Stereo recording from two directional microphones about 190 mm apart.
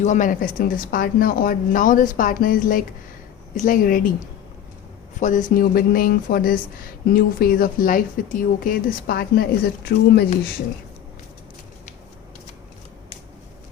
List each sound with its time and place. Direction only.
0.0 s speech: 40° left (ahead or behind)
5.2 s speech: 40° left (ahead or behind)